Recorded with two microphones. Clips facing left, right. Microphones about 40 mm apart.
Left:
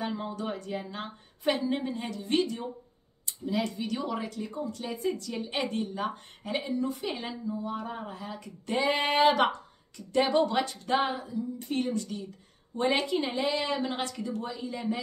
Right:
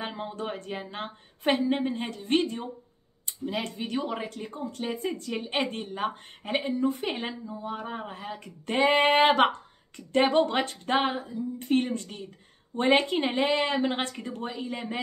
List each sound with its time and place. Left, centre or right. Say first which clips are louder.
0.0 s speech: even; right